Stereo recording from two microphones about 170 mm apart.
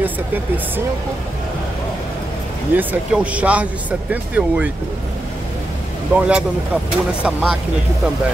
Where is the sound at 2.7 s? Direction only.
10° right (ahead or behind).